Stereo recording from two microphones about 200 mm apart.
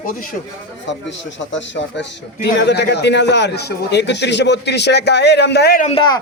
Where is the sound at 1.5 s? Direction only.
60° left (ahead or behind).